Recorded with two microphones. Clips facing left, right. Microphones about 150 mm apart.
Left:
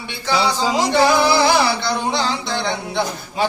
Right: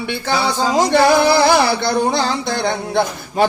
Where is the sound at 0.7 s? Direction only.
50° right (ahead or behind).